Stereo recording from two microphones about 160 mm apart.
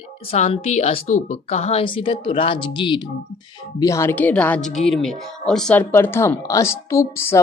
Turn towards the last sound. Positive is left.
turn(degrees=15)  # may be behind; listen again after turning